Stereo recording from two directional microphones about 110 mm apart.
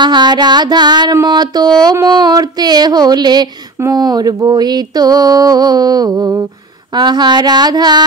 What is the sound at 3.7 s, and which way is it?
Speech, 25° right (ahead or behind).